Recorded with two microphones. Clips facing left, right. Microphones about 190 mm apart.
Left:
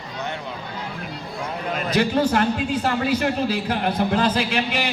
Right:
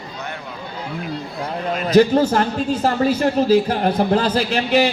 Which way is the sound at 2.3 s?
40° right (ahead or behind).